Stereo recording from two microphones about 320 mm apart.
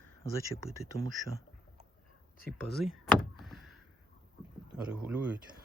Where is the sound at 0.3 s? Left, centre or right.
Centre.